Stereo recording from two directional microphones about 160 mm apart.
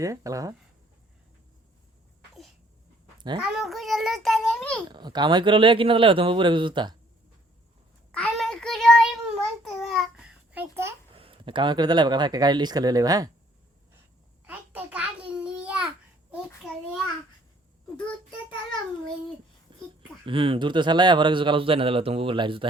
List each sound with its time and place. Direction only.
0.0 s speech: 20° right (ahead or behind)
3.2 s dog: 30° right (ahead or behind)
3.4 s a child's voice: centre (ahead or behind)
4.9 s speech: 30° right (ahead or behind)
8.1 s child singing: 5° left (ahead or behind); by 10.9 s 15° right (ahead or behind)
11.1 s speech: 35° right (ahead or behind)
14.4 s a sound: 10° right (ahead or behind)
20.2 s speech: 35° right (ahead or behind)